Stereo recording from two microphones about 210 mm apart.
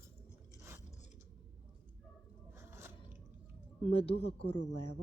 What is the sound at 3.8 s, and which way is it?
Speech, 30° left (ahead or behind).